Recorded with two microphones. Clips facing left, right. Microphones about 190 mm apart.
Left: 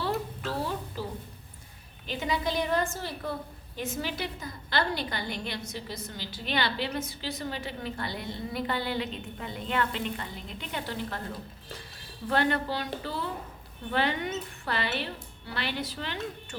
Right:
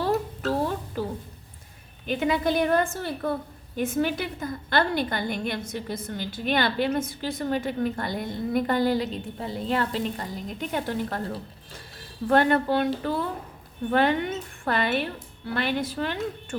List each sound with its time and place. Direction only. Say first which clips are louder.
0.0 s a sound: right 6 dB; 45° right (ahead or behind)
2.0 s a woman's voice: right 6 dB; 55° right (ahead or behind)
12.3 s a woman's voice: right 7 dB; 50° right (ahead or behind)